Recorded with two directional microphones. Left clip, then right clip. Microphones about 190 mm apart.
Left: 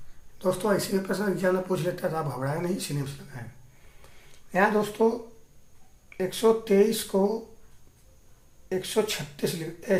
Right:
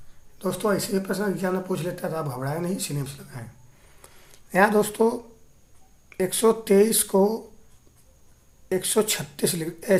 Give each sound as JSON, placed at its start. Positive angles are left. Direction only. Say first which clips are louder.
{"t": 0.3, "sound": "speech", "louder": "even", "side_deg": -30}
{"t": 4.0, "sound": "a sound", "louder": "right 3 dB", "side_deg": -40}
{"t": 6.1, "sound": "speech", "louder": "right 2 dB", "side_deg": -45}
{"t": 8.7, "sound": "speech", "louder": "right 3 dB", "side_deg": -45}